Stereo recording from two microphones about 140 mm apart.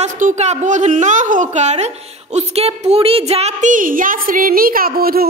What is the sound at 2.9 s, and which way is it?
A woman's voice, 45° right (ahead or behind).